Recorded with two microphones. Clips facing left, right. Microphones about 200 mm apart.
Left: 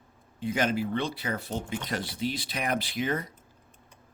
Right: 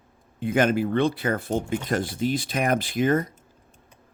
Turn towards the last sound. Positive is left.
turn(degrees=-45)  # may be behind; listen again after turning